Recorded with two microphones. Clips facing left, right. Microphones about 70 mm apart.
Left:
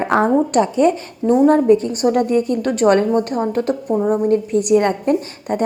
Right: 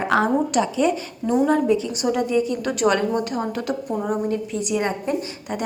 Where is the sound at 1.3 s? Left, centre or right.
Left.